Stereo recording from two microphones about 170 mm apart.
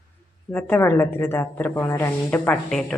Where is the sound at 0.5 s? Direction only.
10° left (ahead or behind).